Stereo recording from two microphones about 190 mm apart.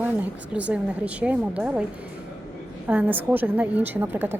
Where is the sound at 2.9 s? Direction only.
10° right (ahead or behind).